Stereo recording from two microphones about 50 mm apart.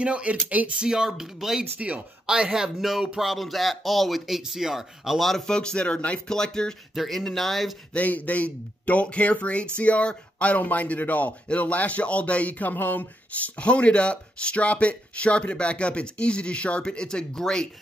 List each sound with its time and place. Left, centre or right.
0.0 s speech: right
0.7 s speech: centre
1.8 s speech: right
2.2 s speech: centre
5.3 s speech: centre
6.2 s speech: centre
7.0 s speech: centre
7.9 s speech: left
13.6 s speech: left